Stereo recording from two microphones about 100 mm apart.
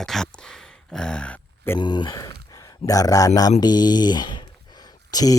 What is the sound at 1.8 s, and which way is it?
Speech, 50° left (ahead or behind).